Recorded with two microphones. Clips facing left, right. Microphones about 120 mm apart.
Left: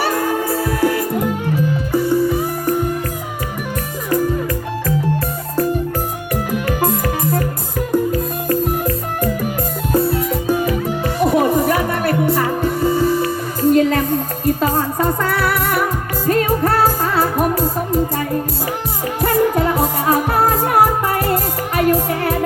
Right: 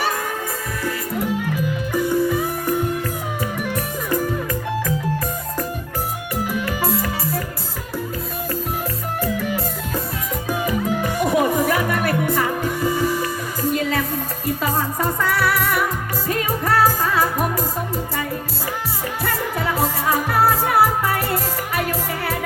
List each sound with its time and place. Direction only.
0.8 s music: 65° left (ahead or behind)
1.9 s music: 25° left (ahead or behind)
7.2 s music: 50° left (ahead or behind)
11.2 s music: 25° left (ahead or behind)
13.7 s music: 45° left (ahead or behind)
19.2 s music: 45° left (ahead or behind)